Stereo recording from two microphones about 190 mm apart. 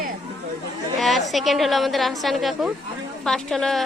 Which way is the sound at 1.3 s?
Centre (ahead or behind).